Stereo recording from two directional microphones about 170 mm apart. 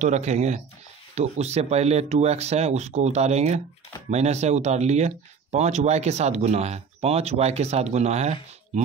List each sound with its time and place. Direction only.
0.0 s speech: 40° right (ahead or behind)